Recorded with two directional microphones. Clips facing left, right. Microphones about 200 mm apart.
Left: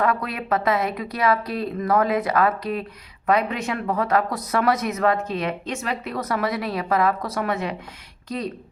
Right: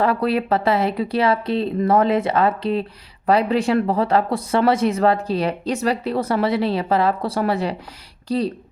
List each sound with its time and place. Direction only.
0.0 s speech: 30° right (ahead or behind)